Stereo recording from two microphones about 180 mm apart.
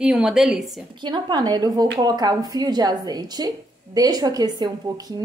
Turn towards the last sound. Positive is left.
turn(degrees=-20)  # may be behind; listen again after turning